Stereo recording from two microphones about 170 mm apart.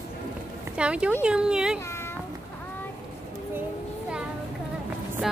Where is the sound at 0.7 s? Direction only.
5° right (ahead or behind).